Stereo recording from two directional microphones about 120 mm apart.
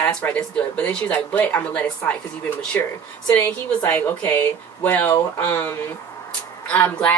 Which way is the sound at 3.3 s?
15° left (ahead or behind).